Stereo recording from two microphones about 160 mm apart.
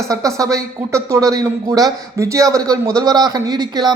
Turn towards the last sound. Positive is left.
turn(degrees=-25)  # may be behind; listen again after turning